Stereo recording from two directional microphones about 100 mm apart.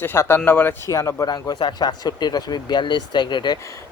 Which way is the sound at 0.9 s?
30° left (ahead or behind).